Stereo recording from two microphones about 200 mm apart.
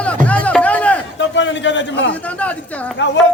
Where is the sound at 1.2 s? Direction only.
65° left (ahead or behind).